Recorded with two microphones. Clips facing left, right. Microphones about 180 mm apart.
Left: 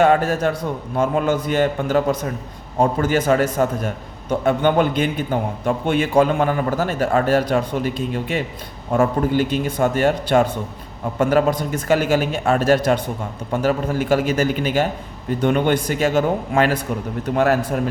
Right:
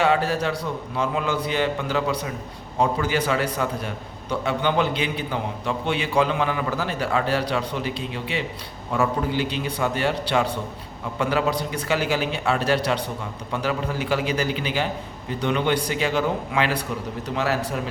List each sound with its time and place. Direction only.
0.0 s a man's voice: 50° left (ahead or behind)